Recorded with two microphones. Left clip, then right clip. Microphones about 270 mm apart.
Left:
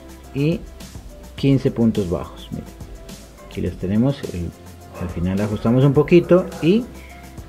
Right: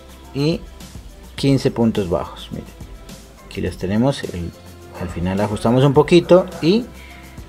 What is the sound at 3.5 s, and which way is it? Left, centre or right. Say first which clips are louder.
Speech: right 2 dB; right.